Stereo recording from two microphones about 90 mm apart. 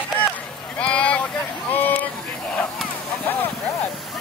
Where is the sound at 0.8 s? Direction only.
15° left (ahead or behind).